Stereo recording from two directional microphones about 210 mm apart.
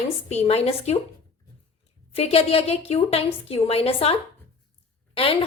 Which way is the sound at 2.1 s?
30° left (ahead or behind).